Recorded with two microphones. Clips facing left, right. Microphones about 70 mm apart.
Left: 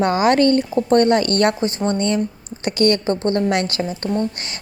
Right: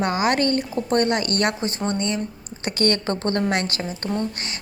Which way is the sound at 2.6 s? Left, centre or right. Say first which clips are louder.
Left 5 dB; right.